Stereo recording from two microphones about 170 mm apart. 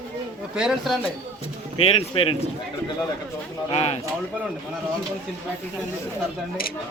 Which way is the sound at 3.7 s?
40° left (ahead or behind).